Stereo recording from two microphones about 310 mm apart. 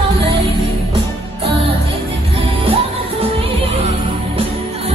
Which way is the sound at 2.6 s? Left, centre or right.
Centre.